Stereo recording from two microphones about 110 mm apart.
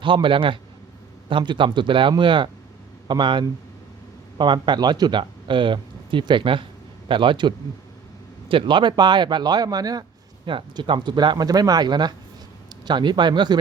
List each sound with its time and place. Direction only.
0.0 s speech: 50° right (ahead or behind)
10.5 s speech: 50° right (ahead or behind)